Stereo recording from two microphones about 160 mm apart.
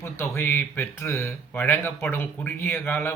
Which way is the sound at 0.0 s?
15° left (ahead or behind).